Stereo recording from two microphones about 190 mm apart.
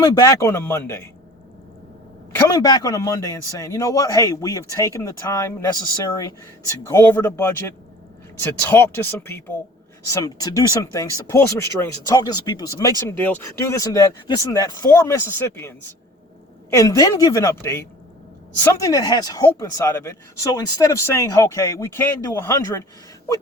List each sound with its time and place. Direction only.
0.0 s speech: 20° left (ahead or behind)
2.3 s speech: 15° left (ahead or behind)
6.9 s speech: 15° left (ahead or behind)